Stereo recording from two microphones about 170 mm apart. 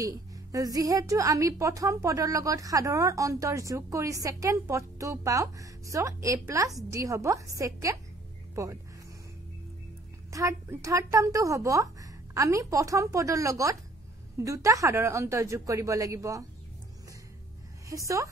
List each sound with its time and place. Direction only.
0.0 s a woman's voice: 20° right (ahead or behind)
10.3 s a woman's voice: 20° right (ahead or behind)
17.8 s a woman's voice: 20° right (ahead or behind)